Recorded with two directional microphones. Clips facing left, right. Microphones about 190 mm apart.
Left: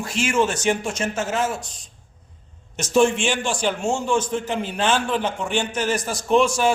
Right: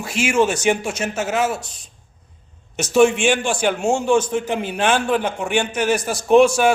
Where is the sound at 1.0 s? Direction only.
65° right (ahead or behind).